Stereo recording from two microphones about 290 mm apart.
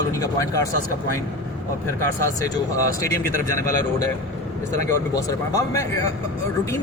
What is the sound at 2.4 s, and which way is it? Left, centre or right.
A man's voice, centre.